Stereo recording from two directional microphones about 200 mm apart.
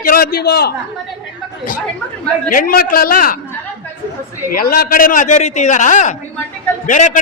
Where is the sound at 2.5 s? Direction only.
45° left (ahead or behind).